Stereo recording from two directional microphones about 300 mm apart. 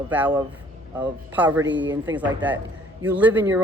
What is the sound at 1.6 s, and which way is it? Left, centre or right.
Speech, right.